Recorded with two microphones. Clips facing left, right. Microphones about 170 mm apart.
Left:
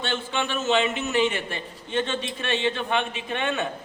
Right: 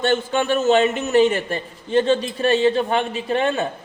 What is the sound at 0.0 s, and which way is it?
A man's voice, 45° right (ahead or behind).